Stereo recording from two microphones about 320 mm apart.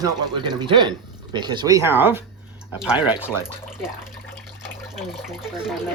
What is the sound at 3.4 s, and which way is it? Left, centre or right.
Speech, centre.